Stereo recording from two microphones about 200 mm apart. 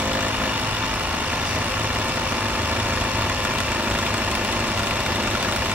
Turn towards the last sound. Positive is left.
turn(degrees=-5)  # may be behind; listen again after turning